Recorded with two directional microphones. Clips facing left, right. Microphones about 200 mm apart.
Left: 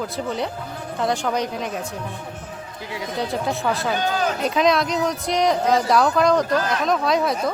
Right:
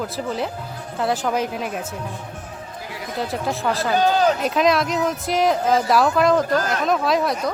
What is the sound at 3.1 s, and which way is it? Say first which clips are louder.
Speech: even; centre (ahead or behind).